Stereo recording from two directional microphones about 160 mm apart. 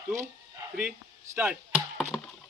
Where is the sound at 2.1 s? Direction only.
5° left (ahead or behind).